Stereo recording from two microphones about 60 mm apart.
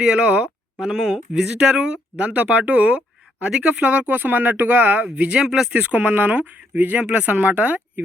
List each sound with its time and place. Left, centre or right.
0.0 s speech: centre
0.9 s speech: centre
1.3 s speech: centre; by 5.0 s right
5.1 s speech: centre
5.7 s speech: right